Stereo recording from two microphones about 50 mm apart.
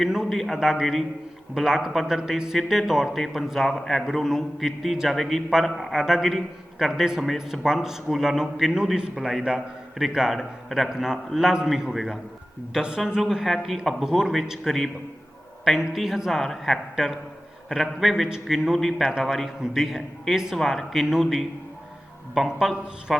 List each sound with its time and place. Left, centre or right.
0.0 s a man's voice: centre
12.7 s a man's voice: centre
16.3 s a man's voice: centre
16.9 s a man's voice: centre
20.6 s a man's voice: centre